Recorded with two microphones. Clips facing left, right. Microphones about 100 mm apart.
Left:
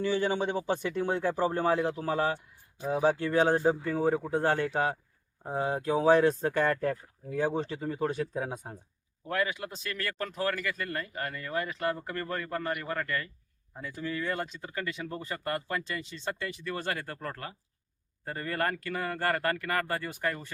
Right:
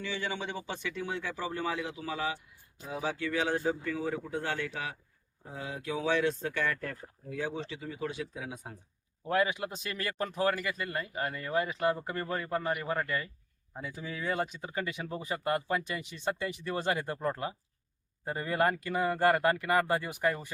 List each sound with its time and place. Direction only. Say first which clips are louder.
0.0 s speech: left 8 dB; 40° left (ahead or behind)
9.3 s speech: right 2 dB; 20° right (ahead or behind)